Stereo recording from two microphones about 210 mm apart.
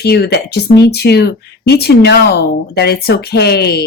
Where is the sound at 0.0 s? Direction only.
50° left (ahead or behind).